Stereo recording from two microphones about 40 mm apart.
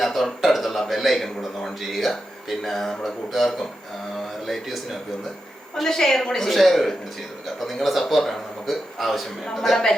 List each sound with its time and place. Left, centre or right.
0.0 s a man's voice: centre
5.7 s a woman's voice: centre